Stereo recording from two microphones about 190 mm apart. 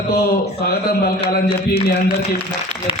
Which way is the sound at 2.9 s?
30° left (ahead or behind).